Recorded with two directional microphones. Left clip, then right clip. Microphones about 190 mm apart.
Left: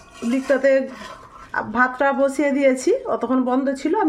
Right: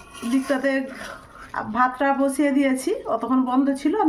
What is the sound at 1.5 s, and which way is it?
A woman's voice, 40° left (ahead or behind).